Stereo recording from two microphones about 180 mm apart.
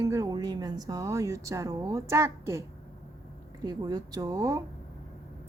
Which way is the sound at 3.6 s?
20° right (ahead or behind).